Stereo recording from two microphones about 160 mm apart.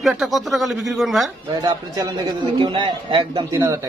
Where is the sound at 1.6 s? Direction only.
25° right (ahead or behind).